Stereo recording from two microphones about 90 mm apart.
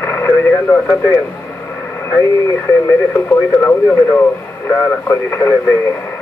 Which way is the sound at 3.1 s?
25° left (ahead or behind).